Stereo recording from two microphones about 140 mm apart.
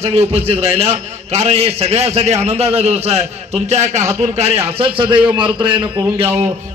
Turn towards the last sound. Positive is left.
turn(degrees=-35)  # may be behind; listen again after turning